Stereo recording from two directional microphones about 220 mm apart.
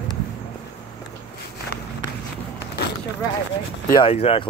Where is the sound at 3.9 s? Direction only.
25° left (ahead or behind).